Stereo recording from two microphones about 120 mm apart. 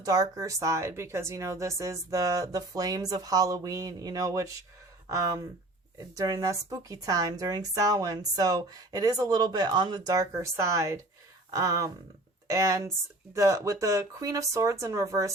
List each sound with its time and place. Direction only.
0.0 s a woman's voice: 30° right (ahead or behind)